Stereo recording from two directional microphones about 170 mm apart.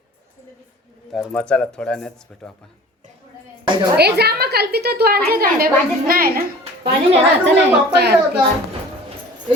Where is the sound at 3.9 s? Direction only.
70° right (ahead or behind).